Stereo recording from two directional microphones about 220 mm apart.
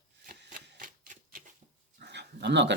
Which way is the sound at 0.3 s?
40° right (ahead or behind).